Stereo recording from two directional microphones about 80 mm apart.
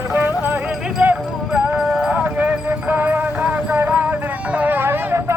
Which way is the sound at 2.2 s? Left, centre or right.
Right.